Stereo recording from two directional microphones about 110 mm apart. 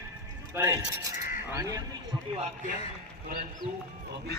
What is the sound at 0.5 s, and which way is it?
Mechanisms, 20° right (ahead or behind).